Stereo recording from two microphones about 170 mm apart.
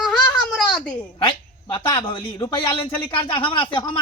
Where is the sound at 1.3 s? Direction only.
30° left (ahead or behind).